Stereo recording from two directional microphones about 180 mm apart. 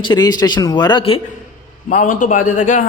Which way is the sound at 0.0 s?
25° left (ahead or behind).